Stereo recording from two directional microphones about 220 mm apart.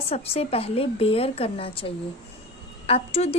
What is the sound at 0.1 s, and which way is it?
A woman's voice, 25° left (ahead or behind).